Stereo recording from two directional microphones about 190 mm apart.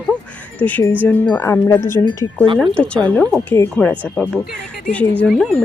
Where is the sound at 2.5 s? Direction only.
5° left (ahead or behind).